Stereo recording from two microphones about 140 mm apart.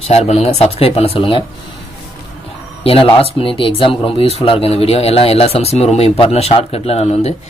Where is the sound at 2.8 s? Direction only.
40° left (ahead or behind).